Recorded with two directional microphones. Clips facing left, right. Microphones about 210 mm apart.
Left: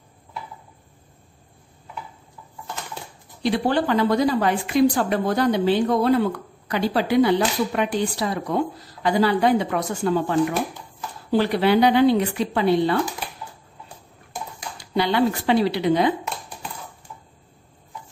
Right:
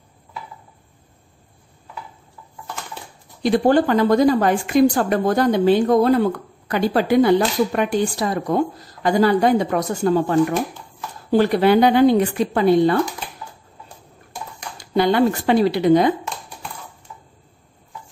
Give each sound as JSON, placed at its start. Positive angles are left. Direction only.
{"t": 3.4, "sound": "a woman's voice", "side_deg": -45}
{"t": 11.3, "sound": "a woman's voice", "side_deg": -45}
{"t": 14.8, "sound": "a woman's voice", "side_deg": -50}